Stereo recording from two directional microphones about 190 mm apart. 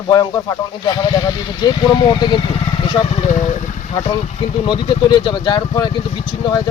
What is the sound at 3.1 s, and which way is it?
Speech, 35° left (ahead or behind).